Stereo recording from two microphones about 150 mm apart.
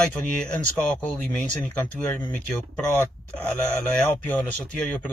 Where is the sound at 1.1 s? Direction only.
10° left (ahead or behind).